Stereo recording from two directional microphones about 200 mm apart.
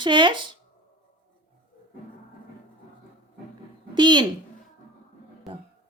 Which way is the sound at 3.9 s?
20° right (ahead or behind).